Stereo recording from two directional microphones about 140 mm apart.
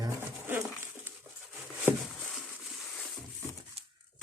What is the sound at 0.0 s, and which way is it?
Dog, 15° right (ahead or behind).